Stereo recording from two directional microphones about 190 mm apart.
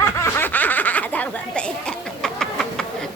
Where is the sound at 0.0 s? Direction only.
15° left (ahead or behind).